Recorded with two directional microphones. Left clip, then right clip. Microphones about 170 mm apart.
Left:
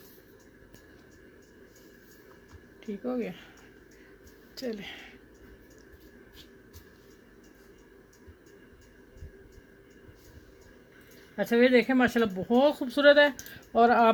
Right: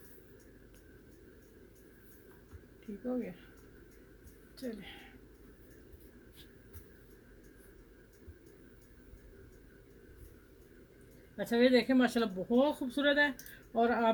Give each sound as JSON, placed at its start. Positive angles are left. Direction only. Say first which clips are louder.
{"t": 3.1, "sound": "speech", "louder": "left 5 dB", "side_deg": 65}
{"t": 4.5, "sound": "speech", "louder": "left 8 dB", "side_deg": 55}
{"t": 11.3, "sound": "speech", "louder": "left 6 dB", "side_deg": 50}